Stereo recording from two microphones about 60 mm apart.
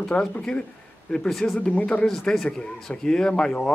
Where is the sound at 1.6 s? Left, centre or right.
Centre.